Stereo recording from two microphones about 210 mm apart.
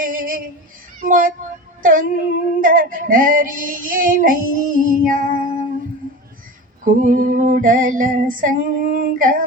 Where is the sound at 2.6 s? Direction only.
40° right (ahead or behind).